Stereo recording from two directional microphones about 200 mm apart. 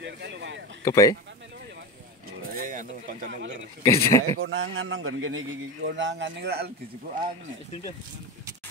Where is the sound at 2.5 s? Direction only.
40° right (ahead or behind).